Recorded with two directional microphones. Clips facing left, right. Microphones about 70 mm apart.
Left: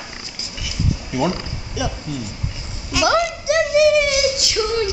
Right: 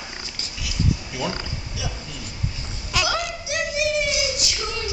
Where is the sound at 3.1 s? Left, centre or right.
Left.